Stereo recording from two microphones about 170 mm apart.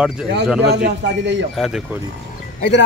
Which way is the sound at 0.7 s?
80° right.